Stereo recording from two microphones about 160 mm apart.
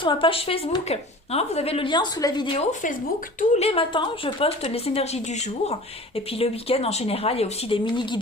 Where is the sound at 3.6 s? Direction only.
35° left (ahead or behind).